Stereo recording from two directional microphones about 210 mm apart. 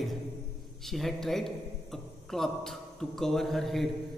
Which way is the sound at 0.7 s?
Centre (ahead or behind).